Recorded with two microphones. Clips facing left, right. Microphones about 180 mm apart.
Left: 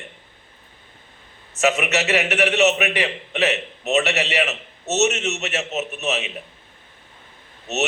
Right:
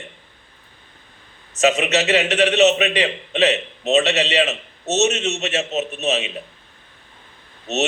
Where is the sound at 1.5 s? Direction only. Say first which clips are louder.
Right 3 dB; 20° right (ahead or behind).